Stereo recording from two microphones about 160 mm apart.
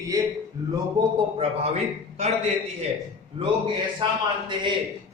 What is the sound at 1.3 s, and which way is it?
Speech, 40° right (ahead or behind).